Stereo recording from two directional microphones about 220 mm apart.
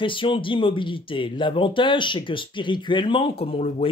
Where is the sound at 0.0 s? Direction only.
20° left (ahead or behind).